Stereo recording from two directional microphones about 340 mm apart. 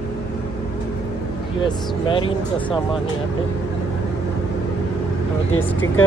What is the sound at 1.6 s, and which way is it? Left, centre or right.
Speech, centre.